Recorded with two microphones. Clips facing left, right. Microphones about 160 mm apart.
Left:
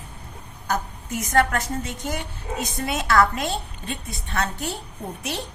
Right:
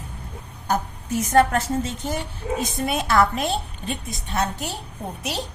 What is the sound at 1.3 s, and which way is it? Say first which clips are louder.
A woman's voice: right 3 dB; 25° right (ahead or behind).